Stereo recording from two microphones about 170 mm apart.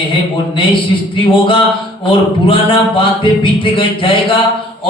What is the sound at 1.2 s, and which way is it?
Speech, 30° left (ahead or behind).